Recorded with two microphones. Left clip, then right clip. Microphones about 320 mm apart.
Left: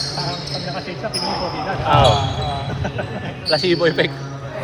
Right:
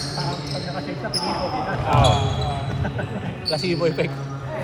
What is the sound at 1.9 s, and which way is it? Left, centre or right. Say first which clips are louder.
Speech: left 5 dB; left.